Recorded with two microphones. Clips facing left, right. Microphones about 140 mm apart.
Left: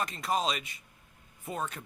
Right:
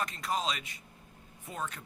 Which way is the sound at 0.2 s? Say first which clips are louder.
Left 5 dB; 15° left (ahead or behind).